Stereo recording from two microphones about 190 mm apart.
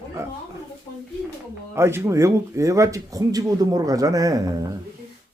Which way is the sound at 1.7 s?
15° right (ahead or behind).